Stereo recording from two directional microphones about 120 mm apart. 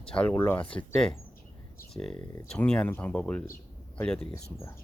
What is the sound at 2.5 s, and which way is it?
Speech, 5° left (ahead or behind).